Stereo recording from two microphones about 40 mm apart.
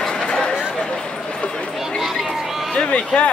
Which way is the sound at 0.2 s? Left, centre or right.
Centre.